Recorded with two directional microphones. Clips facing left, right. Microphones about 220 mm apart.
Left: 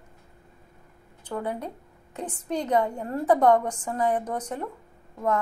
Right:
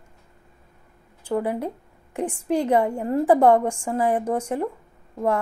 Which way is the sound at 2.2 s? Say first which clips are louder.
Right 7 dB; 30° right (ahead or behind).